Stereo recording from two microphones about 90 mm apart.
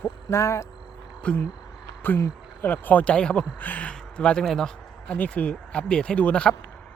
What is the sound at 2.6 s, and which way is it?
Speech, 20° left (ahead or behind).